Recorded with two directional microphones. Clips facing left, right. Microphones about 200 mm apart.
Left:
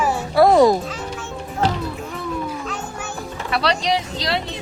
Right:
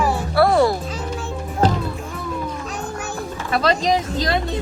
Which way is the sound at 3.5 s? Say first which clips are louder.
Right 2 dB; 45° right (ahead or behind).